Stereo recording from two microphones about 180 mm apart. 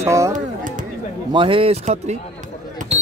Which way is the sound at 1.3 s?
30° right (ahead or behind).